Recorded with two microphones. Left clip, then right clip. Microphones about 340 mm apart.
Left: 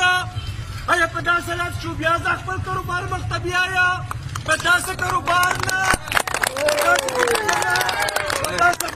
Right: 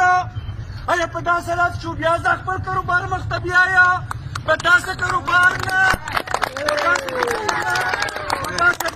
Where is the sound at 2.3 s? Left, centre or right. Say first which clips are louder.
Right 3 dB; centre.